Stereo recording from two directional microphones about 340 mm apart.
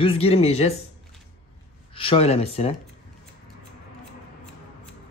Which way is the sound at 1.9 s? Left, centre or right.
Centre.